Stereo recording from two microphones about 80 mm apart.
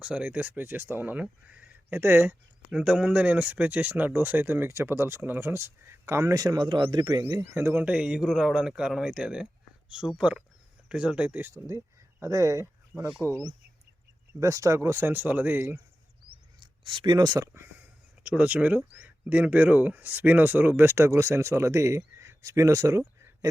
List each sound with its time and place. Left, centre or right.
0.0 s speech: centre
1.9 s speech: right
2.6 s speech: centre; by 7.1 s right
7.4 s speech: right
16.6 s speech: right
17.5 s a sound: right
19.0 s speech: centre; by 23.5 s right